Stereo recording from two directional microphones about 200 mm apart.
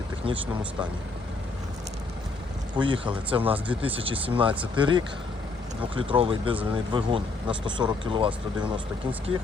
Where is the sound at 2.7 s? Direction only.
25° right (ahead or behind).